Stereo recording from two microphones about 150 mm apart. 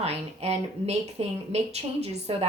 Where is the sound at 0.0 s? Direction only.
45° right (ahead or behind).